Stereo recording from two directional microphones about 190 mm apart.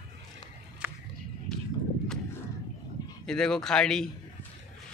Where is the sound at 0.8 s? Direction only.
10° right (ahead or behind).